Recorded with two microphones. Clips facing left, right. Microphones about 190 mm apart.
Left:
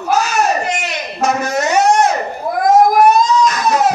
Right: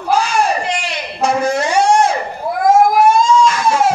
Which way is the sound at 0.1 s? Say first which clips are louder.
Even; 30° right (ahead or behind).